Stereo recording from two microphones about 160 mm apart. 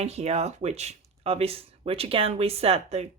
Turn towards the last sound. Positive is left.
turn(degrees=-40)  # may be behind; listen again after turning